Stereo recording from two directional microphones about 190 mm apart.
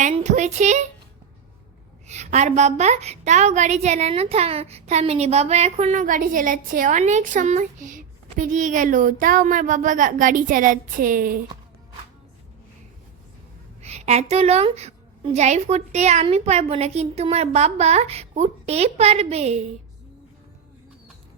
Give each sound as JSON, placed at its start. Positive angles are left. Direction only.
{"t": 0.0, "sound": "a woman's voice", "side_deg": -40}
{"t": 2.0, "sound": "a woman's voice", "side_deg": -35}
{"t": 13.8, "sound": "a woman's voice", "side_deg": -35}